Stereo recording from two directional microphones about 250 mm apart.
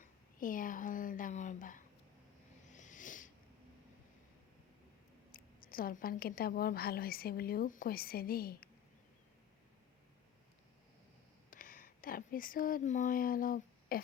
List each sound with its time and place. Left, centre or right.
0.0 s a sound: left
5.3 s speech: left
11.5 s speech: left